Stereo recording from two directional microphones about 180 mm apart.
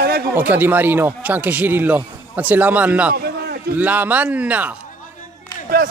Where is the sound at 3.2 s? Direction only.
60° right (ahead or behind).